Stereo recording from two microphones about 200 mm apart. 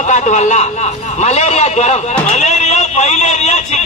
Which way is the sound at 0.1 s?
35° left (ahead or behind).